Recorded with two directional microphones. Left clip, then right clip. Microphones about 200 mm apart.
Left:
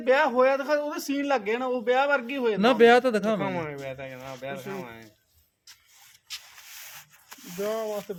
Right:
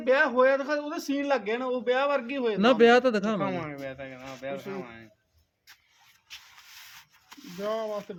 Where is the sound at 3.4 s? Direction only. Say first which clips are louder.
Left 1 dB; 55° left (ahead or behind).